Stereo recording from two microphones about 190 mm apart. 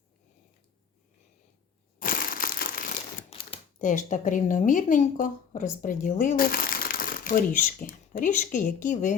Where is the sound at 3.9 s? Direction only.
40° left (ahead or behind).